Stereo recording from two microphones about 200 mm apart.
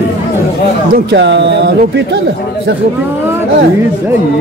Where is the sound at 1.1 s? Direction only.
60° right (ahead or behind).